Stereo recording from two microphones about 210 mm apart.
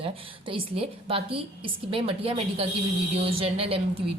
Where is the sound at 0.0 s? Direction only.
25° right (ahead or behind).